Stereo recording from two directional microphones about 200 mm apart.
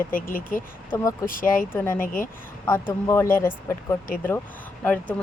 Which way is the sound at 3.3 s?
10° left (ahead or behind).